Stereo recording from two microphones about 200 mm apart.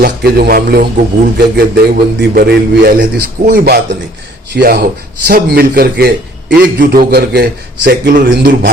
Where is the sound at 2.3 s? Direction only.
50° right (ahead or behind).